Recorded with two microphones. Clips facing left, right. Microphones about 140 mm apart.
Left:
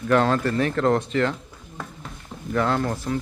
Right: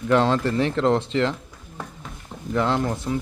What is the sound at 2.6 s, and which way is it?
Speech, 20° right (ahead or behind).